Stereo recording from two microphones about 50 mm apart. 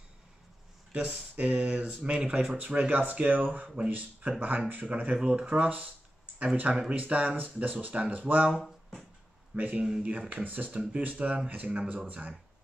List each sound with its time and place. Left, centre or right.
0.9 s speech: right
2.9 s speech: right
9.6 s speech: right
10.7 s speech: right